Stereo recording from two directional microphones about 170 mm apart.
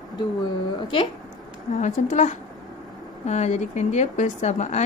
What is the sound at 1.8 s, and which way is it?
Speech, 45° left (ahead or behind).